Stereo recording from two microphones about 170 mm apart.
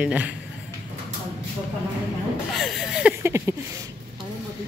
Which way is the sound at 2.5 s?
Centre (ahead or behind).